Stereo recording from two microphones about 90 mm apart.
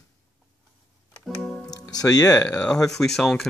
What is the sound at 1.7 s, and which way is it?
Speech, 45° left (ahead or behind).